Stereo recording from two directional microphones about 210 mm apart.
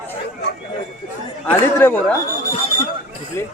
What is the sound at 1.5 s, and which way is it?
Speech, 10° left (ahead or behind).